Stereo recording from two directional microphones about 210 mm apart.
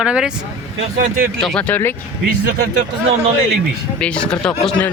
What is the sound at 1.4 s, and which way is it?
Speech, 5° left (ahead or behind).